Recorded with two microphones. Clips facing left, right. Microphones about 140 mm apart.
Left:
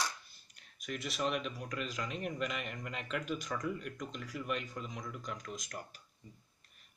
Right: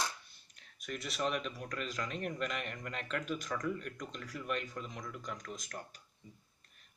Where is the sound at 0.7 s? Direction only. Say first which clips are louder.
Left 1 dB; centre (ahead or behind).